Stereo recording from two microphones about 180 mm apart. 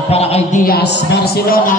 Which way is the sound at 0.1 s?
35° left (ahead or behind).